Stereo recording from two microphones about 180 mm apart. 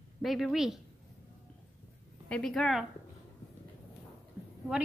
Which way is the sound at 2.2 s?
5° left (ahead or behind).